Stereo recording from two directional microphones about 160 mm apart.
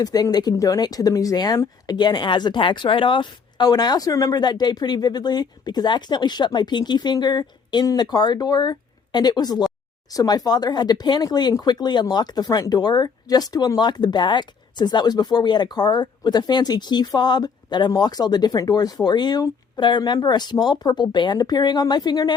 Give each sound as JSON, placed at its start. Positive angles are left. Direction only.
{"t": 0.0, "sound": "speech", "side_deg": 25}